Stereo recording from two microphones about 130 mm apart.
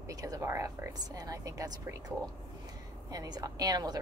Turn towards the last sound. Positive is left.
turn(degrees=-30)  # may be behind; listen again after turning